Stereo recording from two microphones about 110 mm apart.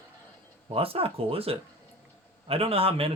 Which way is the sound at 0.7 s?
60° right (ahead or behind).